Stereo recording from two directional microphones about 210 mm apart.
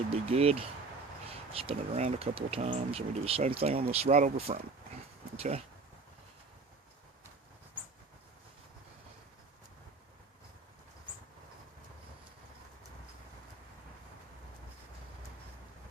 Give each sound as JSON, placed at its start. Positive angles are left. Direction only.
{"t": 0.3, "sound": "speech", "side_deg": -30}